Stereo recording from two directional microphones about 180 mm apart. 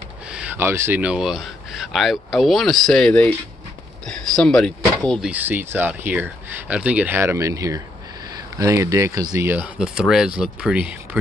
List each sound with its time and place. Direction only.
0.3 s speech: 5° right (ahead or behind)
5.3 s speech: 10° right (ahead or behind)